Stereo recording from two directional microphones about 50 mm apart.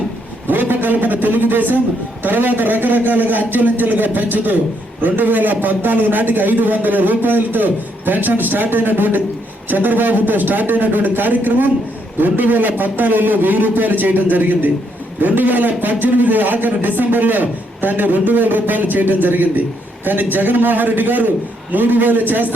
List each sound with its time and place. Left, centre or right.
0.4 s a man's voice: right